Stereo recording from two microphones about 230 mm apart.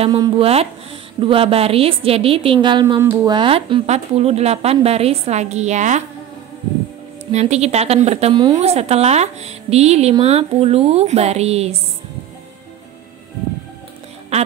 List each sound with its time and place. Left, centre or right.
0.0 s a woman's voice: right
7.3 s a woman's voice: right